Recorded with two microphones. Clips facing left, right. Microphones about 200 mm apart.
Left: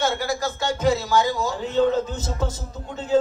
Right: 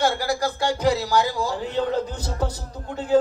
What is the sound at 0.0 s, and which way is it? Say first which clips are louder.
A man's voice: right 1 dB; 25° left (ahead or behind).